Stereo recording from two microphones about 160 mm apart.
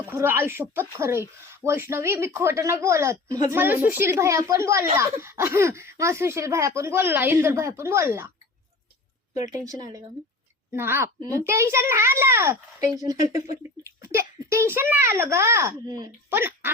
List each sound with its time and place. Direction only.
0.0 s speech: 15° right (ahead or behind)
9.3 s speech: 20° right (ahead or behind)
13.2 s speech: 50° left (ahead or behind)
14.1 s speech: 15° right (ahead or behind)